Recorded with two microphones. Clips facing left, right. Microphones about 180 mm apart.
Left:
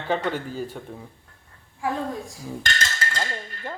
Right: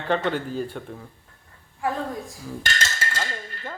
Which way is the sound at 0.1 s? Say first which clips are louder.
Right 2 dB; 5° left (ahead or behind).